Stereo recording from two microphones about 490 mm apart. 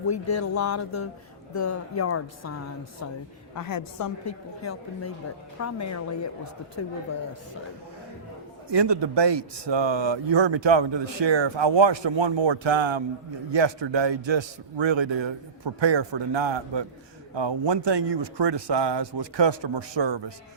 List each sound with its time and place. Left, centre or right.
0.1 s a woman's voice: left
3.5 s a woman's voice: left
8.7 s speech: right